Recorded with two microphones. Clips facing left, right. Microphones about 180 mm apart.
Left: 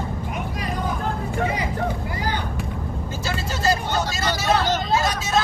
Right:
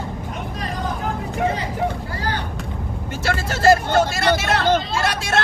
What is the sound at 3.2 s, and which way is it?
Vehicle, 80° right.